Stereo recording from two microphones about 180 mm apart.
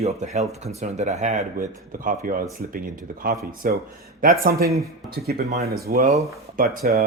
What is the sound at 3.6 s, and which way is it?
Speech, 50° right (ahead or behind).